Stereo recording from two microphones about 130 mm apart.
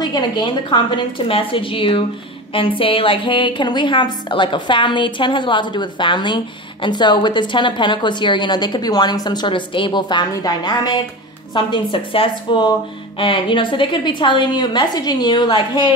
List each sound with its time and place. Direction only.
0.0 s a woman's voice: 35° left (ahead or behind)